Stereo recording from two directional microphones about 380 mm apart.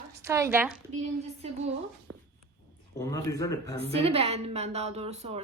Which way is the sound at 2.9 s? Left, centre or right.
Centre.